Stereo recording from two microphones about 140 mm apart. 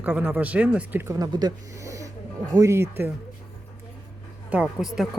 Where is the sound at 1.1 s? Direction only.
30° right (ahead or behind).